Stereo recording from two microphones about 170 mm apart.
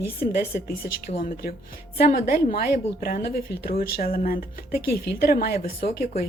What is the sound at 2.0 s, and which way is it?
A woman's voice, 60° left (ahead or behind).